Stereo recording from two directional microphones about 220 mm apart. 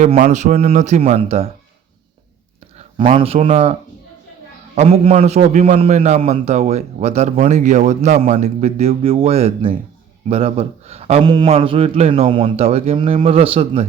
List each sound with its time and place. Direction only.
0.0 s speech: 30° right (ahead or behind)
2.7 s a man's voice: 30° right (ahead or behind)